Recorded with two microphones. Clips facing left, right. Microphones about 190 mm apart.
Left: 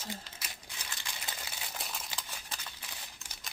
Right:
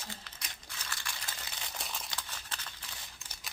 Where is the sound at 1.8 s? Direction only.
Centre (ahead or behind).